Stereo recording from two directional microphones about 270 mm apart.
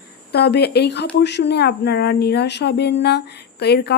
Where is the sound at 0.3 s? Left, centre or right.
Left.